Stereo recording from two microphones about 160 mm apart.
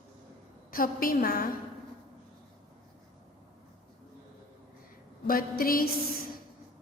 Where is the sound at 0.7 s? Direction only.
65° left (ahead or behind).